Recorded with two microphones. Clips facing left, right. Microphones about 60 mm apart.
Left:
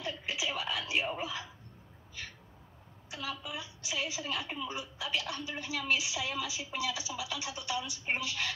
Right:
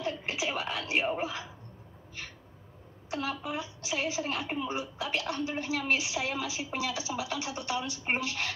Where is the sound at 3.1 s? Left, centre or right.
Right.